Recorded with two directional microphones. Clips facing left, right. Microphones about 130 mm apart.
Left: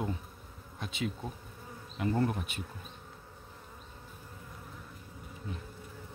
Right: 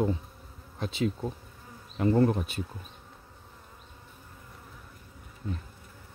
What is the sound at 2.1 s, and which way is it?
Speech, 35° right (ahead or behind).